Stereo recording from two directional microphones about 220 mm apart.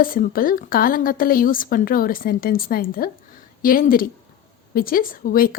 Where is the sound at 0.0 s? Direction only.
40° left (ahead or behind).